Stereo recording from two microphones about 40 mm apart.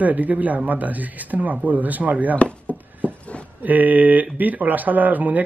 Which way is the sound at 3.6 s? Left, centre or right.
Right.